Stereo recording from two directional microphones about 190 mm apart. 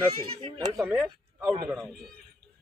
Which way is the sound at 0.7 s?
10° right (ahead or behind).